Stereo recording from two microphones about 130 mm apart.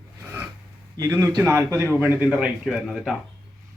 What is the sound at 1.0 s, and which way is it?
A man's voice, 20° right (ahead or behind).